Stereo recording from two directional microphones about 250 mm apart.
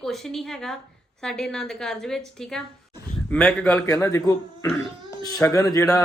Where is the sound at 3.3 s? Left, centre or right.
Centre.